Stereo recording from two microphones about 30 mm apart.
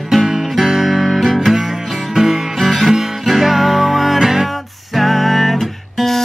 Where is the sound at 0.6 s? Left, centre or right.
Centre.